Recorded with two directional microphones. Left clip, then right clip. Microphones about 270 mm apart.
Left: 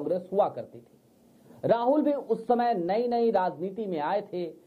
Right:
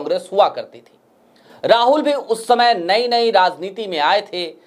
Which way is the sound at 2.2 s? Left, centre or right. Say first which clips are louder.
Right 9 dB; right.